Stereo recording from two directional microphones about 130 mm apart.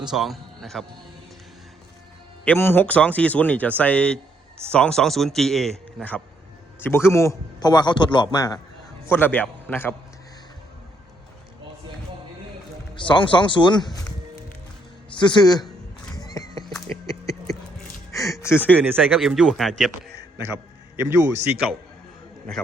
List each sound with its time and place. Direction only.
0.0 s a man's voice: 5° right (ahead or behind)
2.6 s a man's voice: 15° left (ahead or behind)
9.0 s speech: 15° left (ahead or behind)
13.0 s a man's voice: 40° left (ahead or behind)
15.1 s a man's voice: 35° left (ahead or behind)
16.1 s a sound: 30° left (ahead or behind)
18.1 s music: 25° left (ahead or behind)
19.1 s a man's voice: centre (ahead or behind)
21.5 s a man's voice: 10° right (ahead or behind)